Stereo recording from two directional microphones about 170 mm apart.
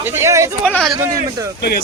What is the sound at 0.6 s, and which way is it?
Speech, 5° left (ahead or behind).